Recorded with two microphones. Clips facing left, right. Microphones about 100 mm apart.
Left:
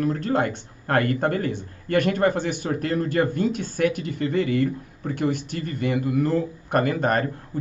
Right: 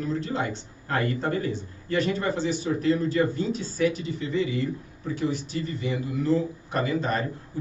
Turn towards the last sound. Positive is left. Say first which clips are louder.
# left 4 dB
turn(degrees=55)  # may be behind; listen again after turning